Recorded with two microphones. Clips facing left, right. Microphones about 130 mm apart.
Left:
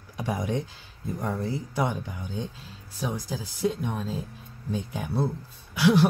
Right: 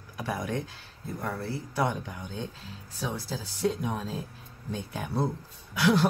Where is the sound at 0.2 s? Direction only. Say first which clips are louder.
Left 3 dB; 20° left (ahead or behind).